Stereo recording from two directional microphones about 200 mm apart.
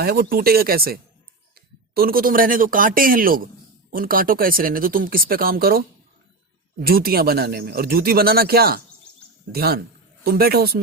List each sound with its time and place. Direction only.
0.0 s speech: 50° right (ahead or behind)
2.0 s speech: 45° right (ahead or behind)